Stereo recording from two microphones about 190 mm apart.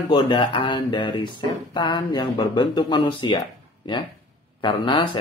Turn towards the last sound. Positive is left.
turn(degrees=25)  # may be behind; listen again after turning